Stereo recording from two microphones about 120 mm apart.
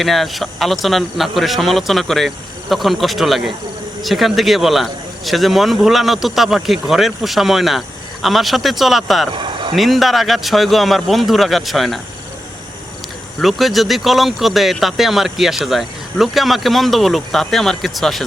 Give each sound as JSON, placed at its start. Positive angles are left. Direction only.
{"t": 0.0, "sound": "speech", "side_deg": 0}
{"t": 9.3, "sound": "a sound", "side_deg": -45}
{"t": 9.7, "sound": "speech", "side_deg": 0}
{"t": 13.4, "sound": "speech", "side_deg": 0}